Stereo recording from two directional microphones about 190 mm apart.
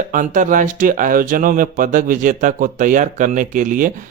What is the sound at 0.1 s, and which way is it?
Speech, 45° right (ahead or behind).